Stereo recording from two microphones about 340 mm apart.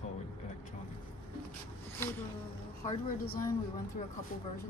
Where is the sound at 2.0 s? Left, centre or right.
Centre.